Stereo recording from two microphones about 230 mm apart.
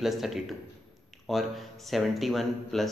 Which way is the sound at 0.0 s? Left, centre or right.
Centre.